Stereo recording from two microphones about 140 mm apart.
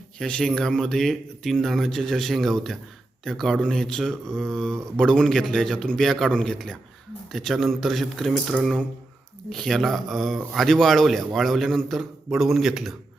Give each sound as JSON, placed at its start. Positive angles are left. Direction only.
{"t": 0.2, "sound": "speech", "side_deg": 5}